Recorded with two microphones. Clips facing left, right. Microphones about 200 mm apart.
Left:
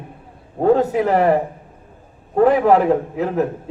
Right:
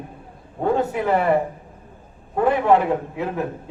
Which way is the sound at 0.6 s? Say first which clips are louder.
Left 6 dB; 40° left (ahead or behind).